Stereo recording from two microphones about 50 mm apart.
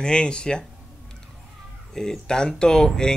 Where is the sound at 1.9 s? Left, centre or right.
Centre.